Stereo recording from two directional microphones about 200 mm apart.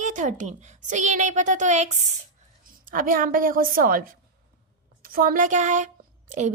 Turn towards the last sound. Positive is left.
turn(degrees=-40)  # may be behind; listen again after turning